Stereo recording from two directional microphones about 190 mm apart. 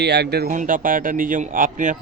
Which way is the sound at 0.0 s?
60° right (ahead or behind).